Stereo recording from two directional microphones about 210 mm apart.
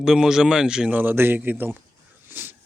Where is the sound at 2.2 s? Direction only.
10° right (ahead or behind).